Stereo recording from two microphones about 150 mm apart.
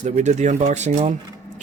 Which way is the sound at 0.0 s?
50° right (ahead or behind).